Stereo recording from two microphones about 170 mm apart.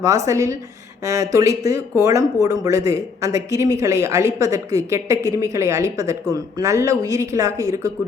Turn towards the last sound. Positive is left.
turn(degrees=-20)  # may be behind; listen again after turning